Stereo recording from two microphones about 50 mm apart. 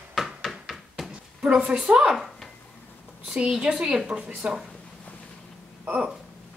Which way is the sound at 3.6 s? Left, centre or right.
Right.